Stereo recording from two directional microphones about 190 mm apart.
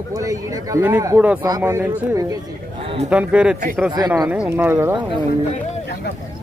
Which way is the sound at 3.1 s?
5° right (ahead or behind).